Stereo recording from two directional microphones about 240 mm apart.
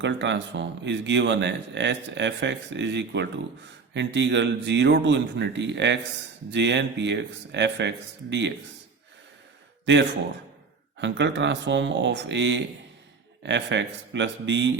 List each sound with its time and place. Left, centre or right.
0.0 s a man's voice: right
9.8 s a man's voice: right